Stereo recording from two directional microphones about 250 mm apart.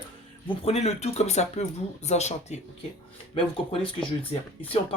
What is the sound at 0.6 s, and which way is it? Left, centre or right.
Speech, left.